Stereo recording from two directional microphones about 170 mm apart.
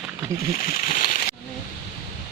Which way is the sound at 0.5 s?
55° left (ahead or behind).